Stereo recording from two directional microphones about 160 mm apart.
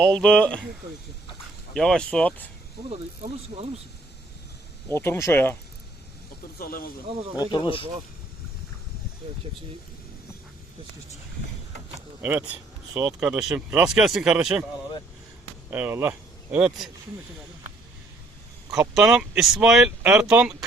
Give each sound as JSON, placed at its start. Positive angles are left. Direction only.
{"t": 0.0, "sound": "speech", "side_deg": 5}
{"t": 1.7, "sound": "speech", "side_deg": 5}
{"t": 2.9, "sound": "speech", "side_deg": -40}
{"t": 4.9, "sound": "speech", "side_deg": 15}
{"t": 6.6, "sound": "speech", "side_deg": 70}
{"t": 7.3, "sound": "speech", "side_deg": 30}
{"t": 12.2, "sound": "speech", "side_deg": -10}
{"t": 12.9, "sound": "speech", "side_deg": -20}
{"t": 13.4, "sound": "speech", "side_deg": -5}
{"t": 15.7, "sound": "speech", "side_deg": -10}
{"t": 18.7, "sound": "speech", "side_deg": -5}